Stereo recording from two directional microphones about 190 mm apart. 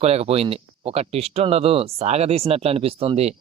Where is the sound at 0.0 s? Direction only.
35° right (ahead or behind).